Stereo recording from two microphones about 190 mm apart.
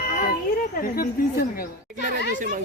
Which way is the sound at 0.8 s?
50° left (ahead or behind).